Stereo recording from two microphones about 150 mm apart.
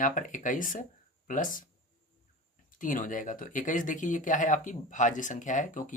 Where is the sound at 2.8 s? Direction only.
60° left (ahead or behind).